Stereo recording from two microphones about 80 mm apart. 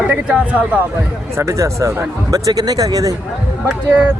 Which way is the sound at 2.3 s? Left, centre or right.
Right.